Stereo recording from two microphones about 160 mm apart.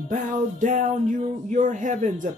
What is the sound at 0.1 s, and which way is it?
Speech, 55° right (ahead or behind).